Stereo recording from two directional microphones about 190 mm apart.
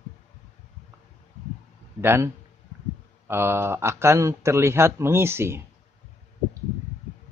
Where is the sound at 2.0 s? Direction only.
10° right (ahead or behind).